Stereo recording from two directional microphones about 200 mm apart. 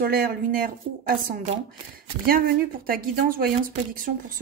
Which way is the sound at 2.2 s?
45° right (ahead or behind).